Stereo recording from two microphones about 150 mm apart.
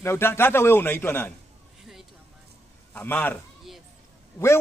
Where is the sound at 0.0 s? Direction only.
15° left (ahead or behind).